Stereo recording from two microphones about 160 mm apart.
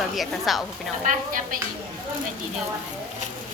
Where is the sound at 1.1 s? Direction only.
55° right (ahead or behind).